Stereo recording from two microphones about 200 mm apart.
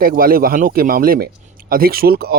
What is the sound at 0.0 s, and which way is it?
Speech, 45° right (ahead or behind).